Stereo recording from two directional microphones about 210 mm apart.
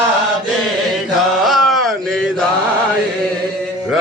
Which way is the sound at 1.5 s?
Centre (ahead or behind).